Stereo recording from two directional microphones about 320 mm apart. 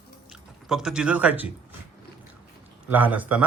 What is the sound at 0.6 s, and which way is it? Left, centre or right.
Speech, centre.